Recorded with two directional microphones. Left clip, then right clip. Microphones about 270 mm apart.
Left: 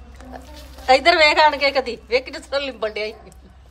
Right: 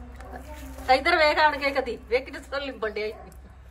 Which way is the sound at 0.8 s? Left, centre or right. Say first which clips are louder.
Left 6 dB; centre.